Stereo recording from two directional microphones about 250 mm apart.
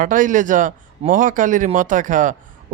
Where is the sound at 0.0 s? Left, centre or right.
Right.